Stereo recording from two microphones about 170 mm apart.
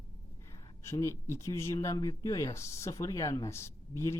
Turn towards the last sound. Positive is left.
turn(degrees=15)  # may be behind; listen again after turning